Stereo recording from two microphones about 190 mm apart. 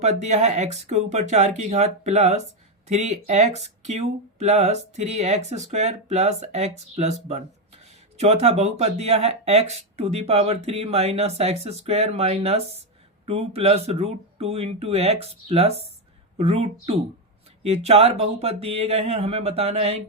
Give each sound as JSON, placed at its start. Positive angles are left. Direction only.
{"t": 0.0, "sound": "speech", "side_deg": -35}